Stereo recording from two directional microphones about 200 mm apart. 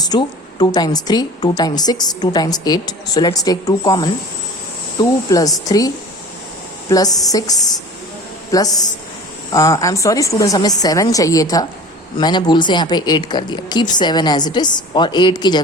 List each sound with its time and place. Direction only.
0.1 s a woman's voice: 20° left (ahead or behind)
6.9 s a woman's voice: 20° left (ahead or behind)